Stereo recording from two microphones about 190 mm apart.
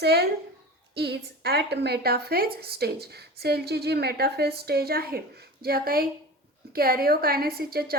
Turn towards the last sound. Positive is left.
turn(degrees=-55)  # may be behind; listen again after turning